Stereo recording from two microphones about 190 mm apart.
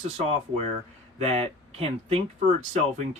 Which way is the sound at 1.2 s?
35° right (ahead or behind).